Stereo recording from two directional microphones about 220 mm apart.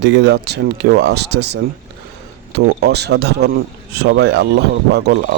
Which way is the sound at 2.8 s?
50° right (ahead or behind).